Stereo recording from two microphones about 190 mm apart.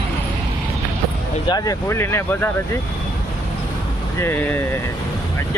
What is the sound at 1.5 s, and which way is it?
Speech, 20° left (ahead or behind).